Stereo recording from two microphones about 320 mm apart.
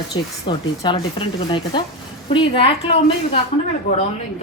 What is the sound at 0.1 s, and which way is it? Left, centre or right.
Speech, centre.